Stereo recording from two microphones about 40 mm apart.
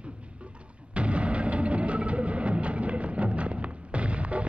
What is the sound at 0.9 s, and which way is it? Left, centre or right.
Music, right.